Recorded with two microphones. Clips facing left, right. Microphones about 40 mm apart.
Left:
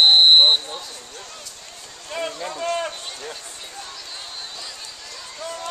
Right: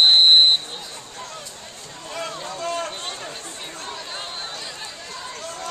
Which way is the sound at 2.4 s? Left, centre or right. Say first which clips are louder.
Left 2 dB; centre.